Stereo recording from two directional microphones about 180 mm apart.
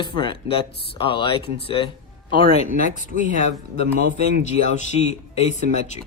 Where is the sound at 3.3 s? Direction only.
60° right (ahead or behind).